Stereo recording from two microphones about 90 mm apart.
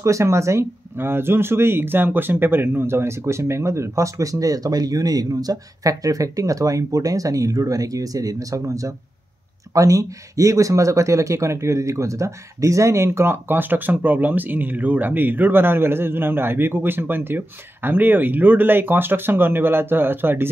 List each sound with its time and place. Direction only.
0.0 s speech: 35° right (ahead or behind)